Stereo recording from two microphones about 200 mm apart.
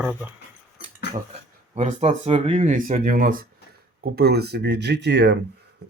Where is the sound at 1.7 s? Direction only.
35° right (ahead or behind).